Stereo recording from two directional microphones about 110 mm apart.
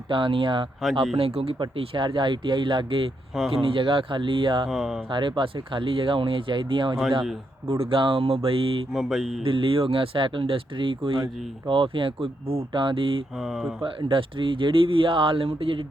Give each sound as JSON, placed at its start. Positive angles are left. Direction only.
{"t": 0.1, "sound": "speech", "side_deg": -50}
{"t": 1.1, "sound": "speech", "side_deg": -60}
{"t": 1.5, "sound": "speech", "side_deg": -50}
{"t": 4.7, "sound": "mantra", "side_deg": 0}
{"t": 5.0, "sound": "speech", "side_deg": -45}
{"t": 8.9, "sound": "mantra", "side_deg": 0}
{"t": 9.4, "sound": "speech", "side_deg": -50}
{"t": 13.3, "sound": "mantra", "side_deg": -5}
{"t": 13.8, "sound": "speech", "side_deg": -50}